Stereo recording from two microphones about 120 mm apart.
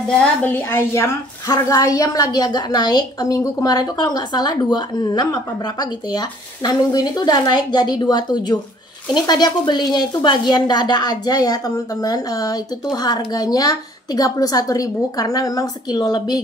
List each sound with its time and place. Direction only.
0.4 s a woman's voice: 15° left (ahead or behind); by 16.4 s 35° left (ahead or behind)